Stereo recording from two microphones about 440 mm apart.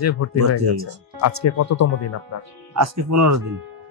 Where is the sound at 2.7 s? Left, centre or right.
Right.